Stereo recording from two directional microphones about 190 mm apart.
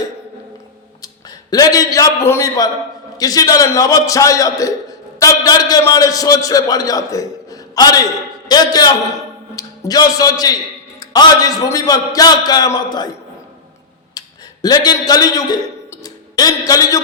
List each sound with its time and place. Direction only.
1.0 s a man's voice: 20° left (ahead or behind)
14.1 s a man's voice: 20° left (ahead or behind)